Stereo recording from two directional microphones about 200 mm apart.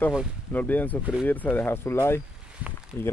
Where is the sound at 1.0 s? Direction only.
5° right (ahead or behind).